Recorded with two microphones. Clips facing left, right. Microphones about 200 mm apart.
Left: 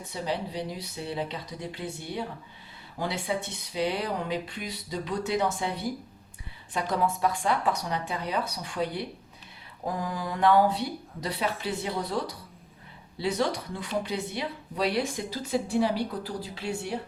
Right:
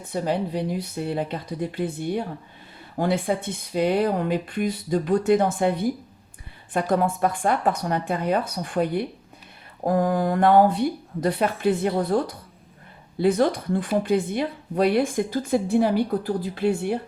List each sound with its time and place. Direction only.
0.0 s speech: 50° right (ahead or behind)